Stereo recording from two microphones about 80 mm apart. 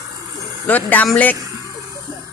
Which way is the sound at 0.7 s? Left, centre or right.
Left.